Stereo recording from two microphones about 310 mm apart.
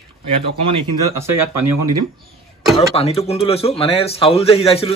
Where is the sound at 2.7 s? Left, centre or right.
Centre.